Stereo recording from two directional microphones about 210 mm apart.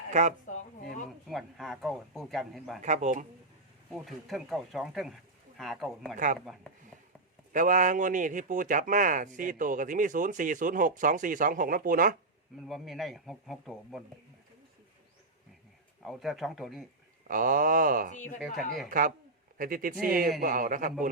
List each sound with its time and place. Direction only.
0.1 s speech: 35° right (ahead or behind)
0.4 s a woman's voice: 35° left (ahead or behind)
1.3 s speech: centre (ahead or behind)
2.8 s speech: 35° right (ahead or behind)
3.9 s speech: centre (ahead or behind)
6.1 s speech: 40° right (ahead or behind)
7.5 s speech: 40° right (ahead or behind)
12.6 s speech: centre (ahead or behind)
16.0 s speech: centre (ahead or behind)
17.2 s speech: 40° right (ahead or behind)
18.3 s speech: centre (ahead or behind)
18.9 s speech: 40° right (ahead or behind)